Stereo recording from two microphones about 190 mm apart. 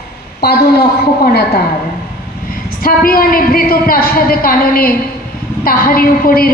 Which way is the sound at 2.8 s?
50° left (ahead or behind).